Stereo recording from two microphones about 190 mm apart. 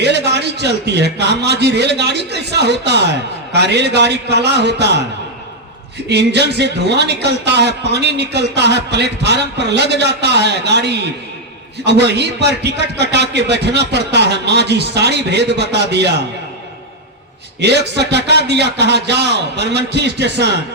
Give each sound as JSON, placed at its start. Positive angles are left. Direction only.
{"t": 0.0, "sound": "a man's voice", "side_deg": -60}
{"t": 6.1, "sound": "a man's voice", "side_deg": -60}
{"t": 17.6, "sound": "a man's voice", "side_deg": -60}